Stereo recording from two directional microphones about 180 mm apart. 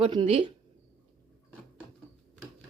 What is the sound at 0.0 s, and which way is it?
Speech, 30° right (ahead or behind).